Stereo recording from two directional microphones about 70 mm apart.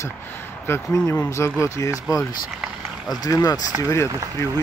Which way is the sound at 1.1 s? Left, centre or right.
Left.